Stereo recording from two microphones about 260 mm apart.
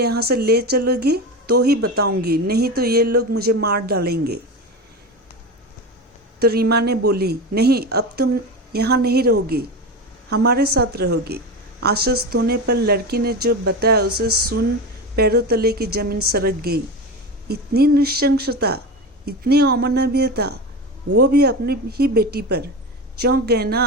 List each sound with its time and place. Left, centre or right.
0.0 s speech: right
6.4 s speech: right
14.3 s a sound: right
15.1 s speech: right